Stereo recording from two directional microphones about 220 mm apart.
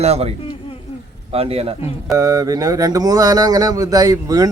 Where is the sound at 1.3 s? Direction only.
25° right (ahead or behind).